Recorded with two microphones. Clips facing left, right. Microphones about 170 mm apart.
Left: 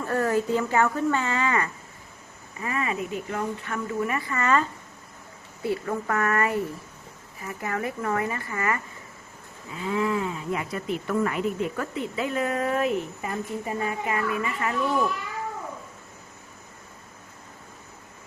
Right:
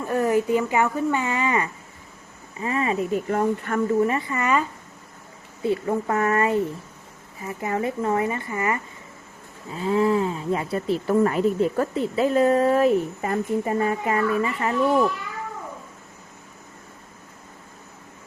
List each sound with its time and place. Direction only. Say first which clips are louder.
0.0 s speech: right 3 dB; 15° right (ahead or behind)
2.6 s speech: right 5 dB; 30° right (ahead or behind); by 3.9 s 45° right (ahead or behind)
4.0 s speech: right 6 dB; 30° right (ahead or behind)
4.3 s speech: right 1 dB; 15° right (ahead or behind)
5.6 s speech: right 4 dB; 20° right (ahead or behind)
9.7 s speech: right 5 dB; 35° right (ahead or behind)
13.2 s speech: right 7 dB; 50° right (ahead or behind); by 14.8 s 30° right (ahead or behind)